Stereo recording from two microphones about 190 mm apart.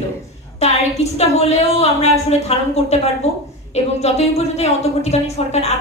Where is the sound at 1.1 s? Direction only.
35° left (ahead or behind).